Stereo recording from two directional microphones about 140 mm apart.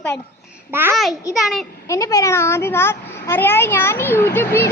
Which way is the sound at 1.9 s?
25° left (ahead or behind).